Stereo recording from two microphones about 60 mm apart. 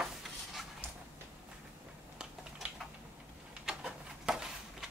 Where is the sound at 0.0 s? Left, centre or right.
Centre.